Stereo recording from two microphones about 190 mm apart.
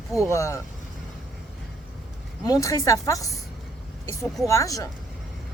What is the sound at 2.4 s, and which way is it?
Speech, 20° left (ahead or behind).